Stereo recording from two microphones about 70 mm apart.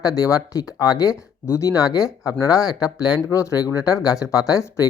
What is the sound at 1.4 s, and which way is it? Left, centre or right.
Speech, left.